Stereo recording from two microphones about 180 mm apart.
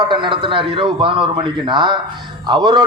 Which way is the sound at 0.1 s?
25° right (ahead or behind).